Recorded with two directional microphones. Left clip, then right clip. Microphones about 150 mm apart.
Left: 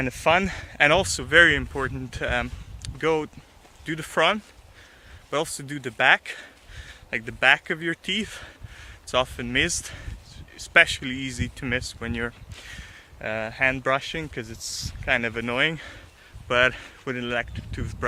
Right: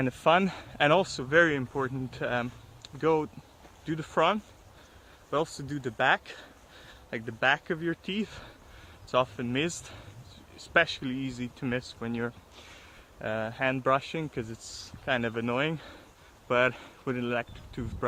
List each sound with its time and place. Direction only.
0.0 s speech: 5° left (ahead or behind)
5.6 s speech: 20° left (ahead or behind)